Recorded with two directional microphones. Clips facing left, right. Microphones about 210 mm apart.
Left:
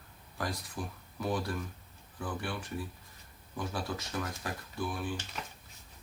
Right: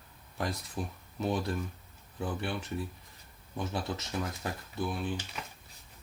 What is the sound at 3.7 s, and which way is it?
Speech, 25° right (ahead or behind).